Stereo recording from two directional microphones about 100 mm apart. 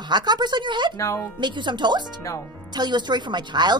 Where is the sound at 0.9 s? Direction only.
30° left (ahead or behind).